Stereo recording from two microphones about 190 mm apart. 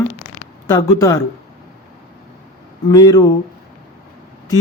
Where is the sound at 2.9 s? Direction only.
20° left (ahead or behind).